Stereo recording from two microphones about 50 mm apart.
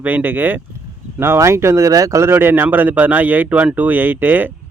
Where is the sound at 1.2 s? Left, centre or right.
Right.